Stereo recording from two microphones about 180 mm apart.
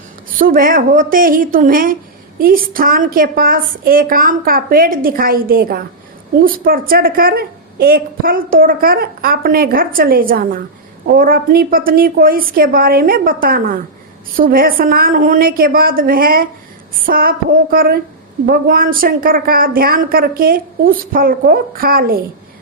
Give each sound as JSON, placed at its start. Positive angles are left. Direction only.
{"t": 0.3, "sound": "a woman's voice", "side_deg": -50}